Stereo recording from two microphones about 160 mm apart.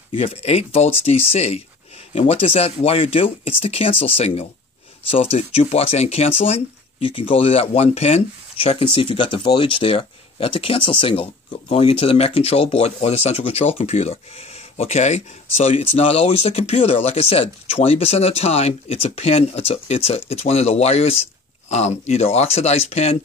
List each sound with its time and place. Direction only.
0.1 s speech: 35° left (ahead or behind)